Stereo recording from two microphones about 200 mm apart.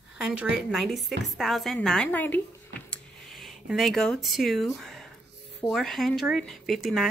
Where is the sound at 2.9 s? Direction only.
Centre (ahead or behind).